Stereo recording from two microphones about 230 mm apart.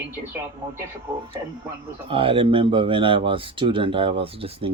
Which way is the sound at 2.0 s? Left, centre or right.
Right.